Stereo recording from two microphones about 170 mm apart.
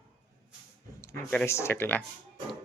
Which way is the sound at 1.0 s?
10° left (ahead or behind).